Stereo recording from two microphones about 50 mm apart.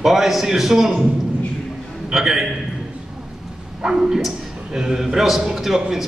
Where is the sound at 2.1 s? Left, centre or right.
Centre.